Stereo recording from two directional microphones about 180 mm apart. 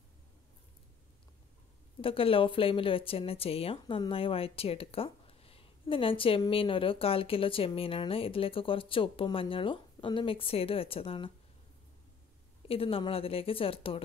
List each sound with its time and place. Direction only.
2.0 s speech: 30° left (ahead or behind)
12.6 s speech: 30° left (ahead or behind)